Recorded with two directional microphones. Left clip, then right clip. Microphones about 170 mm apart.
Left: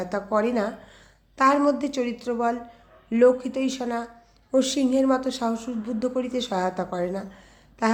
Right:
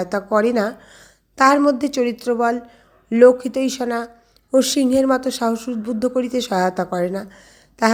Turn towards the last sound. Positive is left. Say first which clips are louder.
# right 7 dB
turn(degrees=-35)  # may be behind; listen again after turning